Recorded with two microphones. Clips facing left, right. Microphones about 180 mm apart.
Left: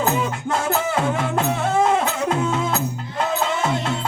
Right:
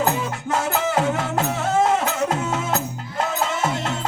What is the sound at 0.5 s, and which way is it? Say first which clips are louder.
Music: right 1 dB; 40° right (ahead or behind).